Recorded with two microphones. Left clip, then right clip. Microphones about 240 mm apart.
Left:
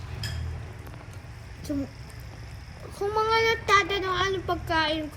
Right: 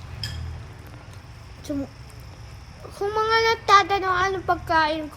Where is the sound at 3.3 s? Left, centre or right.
Right.